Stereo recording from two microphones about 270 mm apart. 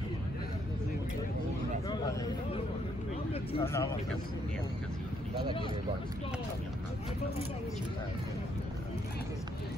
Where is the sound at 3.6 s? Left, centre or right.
Centre.